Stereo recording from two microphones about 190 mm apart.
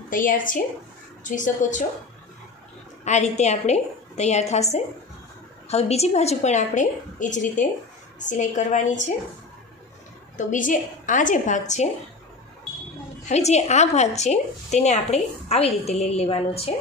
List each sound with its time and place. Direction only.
0.1 s a woman's voice: 45° left (ahead or behind)
3.0 s a woman's voice: 35° left (ahead or behind)
10.3 s a woman's voice: 45° left (ahead or behind)
13.2 s a woman's voice: 35° left (ahead or behind)